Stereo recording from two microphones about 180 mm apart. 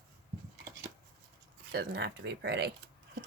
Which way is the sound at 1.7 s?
65° right (ahead or behind).